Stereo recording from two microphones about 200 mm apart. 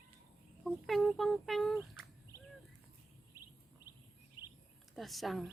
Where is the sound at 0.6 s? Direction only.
Centre (ahead or behind).